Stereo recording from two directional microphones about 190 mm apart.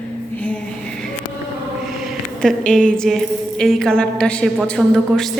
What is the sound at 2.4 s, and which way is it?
A woman's voice, 5° left (ahead or behind).